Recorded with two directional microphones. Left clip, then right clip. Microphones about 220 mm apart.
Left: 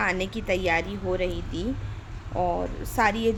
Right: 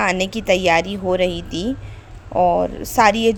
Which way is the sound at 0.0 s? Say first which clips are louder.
Right 7 dB; 40° right (ahead or behind).